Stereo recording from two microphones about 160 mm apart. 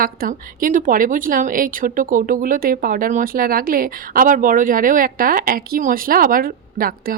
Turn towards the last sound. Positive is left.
turn(degrees=-65)  # may be behind; listen again after turning